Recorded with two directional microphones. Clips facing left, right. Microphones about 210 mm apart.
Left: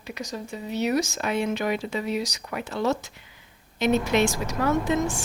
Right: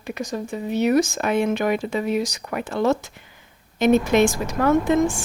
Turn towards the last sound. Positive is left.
turn(degrees=-55)  # may be behind; listen again after turning